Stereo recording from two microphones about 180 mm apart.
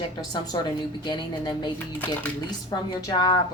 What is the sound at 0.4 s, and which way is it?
A woman's voice, 25° left (ahead or behind).